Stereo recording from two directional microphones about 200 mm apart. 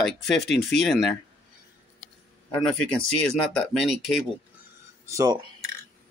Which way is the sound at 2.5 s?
5° left (ahead or behind).